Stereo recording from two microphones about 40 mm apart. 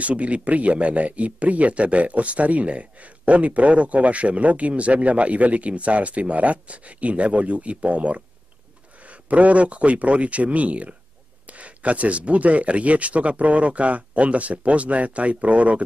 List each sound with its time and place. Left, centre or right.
0.0 s speech: right